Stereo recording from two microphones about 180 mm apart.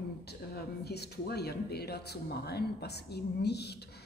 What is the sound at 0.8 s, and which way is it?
Speech, 65° left (ahead or behind).